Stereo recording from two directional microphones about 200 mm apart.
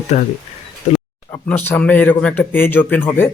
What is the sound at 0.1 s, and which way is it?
Speech, 35° left (ahead or behind).